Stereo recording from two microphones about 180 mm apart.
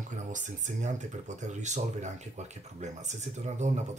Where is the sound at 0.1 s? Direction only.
45° right (ahead or behind).